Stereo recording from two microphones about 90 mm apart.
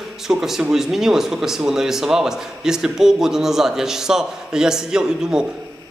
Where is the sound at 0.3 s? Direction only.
5° right (ahead or behind).